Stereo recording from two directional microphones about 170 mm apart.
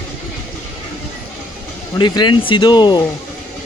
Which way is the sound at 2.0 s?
25° left (ahead or behind).